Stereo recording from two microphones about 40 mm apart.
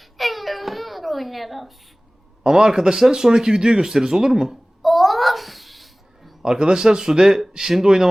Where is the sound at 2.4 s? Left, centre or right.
Centre.